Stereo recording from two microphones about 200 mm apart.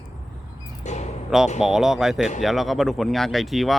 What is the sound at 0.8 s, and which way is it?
Speech, 35° left (ahead or behind).